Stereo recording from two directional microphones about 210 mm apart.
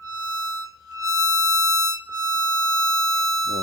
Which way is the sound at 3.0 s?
15° right (ahead or behind).